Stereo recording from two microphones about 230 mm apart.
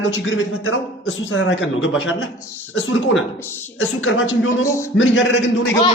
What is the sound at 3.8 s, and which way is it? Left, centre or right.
A man's voice, left.